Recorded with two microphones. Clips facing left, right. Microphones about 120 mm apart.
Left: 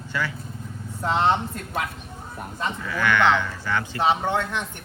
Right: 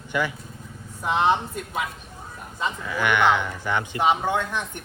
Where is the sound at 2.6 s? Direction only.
15° right (ahead or behind).